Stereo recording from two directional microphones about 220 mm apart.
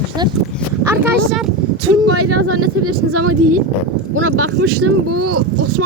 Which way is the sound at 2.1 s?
90° right.